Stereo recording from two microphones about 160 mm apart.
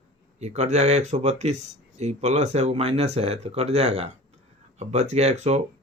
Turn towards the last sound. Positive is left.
turn(degrees=-45)  # may be behind; listen again after turning